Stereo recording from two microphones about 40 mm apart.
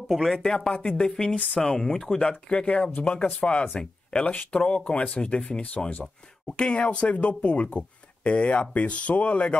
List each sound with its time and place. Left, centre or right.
0.1 s speech: centre
0.4 s speech: centre
4.3 s speech: left